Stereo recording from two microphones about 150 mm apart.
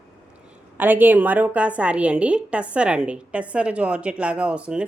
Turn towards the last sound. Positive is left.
turn(degrees=-10)  # may be behind; listen again after turning